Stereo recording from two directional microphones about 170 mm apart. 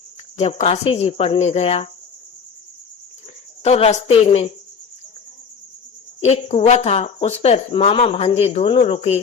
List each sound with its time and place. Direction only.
0.3 s speech: 40° left (ahead or behind)
3.6 s speech: 35° left (ahead or behind)
6.2 s speech: 40° left (ahead or behind)